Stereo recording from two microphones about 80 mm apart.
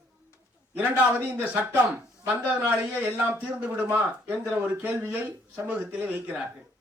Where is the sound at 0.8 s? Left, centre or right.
Centre.